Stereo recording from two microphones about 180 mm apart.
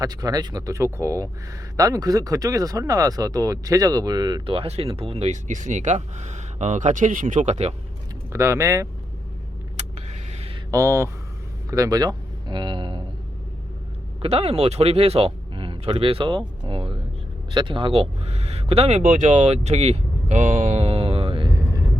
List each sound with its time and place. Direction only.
0.0 s speech: 20° right (ahead or behind); by 7.7 s 40° right (ahead or behind)
8.3 s speech: 15° right (ahead or behind)
9.7 s a sound: 35° right (ahead or behind)
10.7 s speech: 15° right (ahead or behind)
14.2 s speech: 35° right (ahead or behind)